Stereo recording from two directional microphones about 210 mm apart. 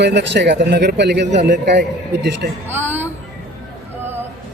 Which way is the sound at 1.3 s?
35° right (ahead or behind).